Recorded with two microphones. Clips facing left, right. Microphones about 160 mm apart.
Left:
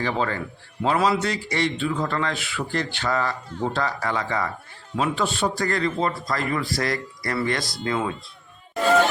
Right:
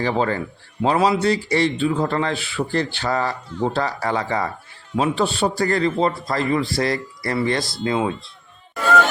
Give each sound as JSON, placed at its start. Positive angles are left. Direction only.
{"t": 0.0, "sound": "a man's voice", "side_deg": -35}